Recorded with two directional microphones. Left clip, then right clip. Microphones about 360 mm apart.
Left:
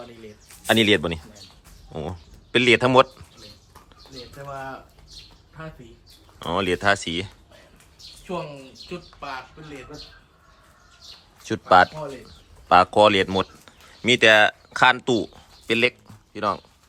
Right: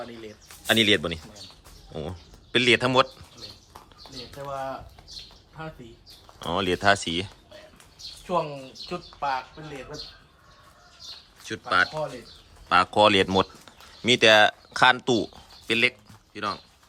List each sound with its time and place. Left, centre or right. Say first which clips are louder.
0.7 s speech: left 2 dB; centre
6.4 s speech: left 1 dB; centre
8.9 s speech: right 6 dB; right
11.4 s speech: left 7 dB; centre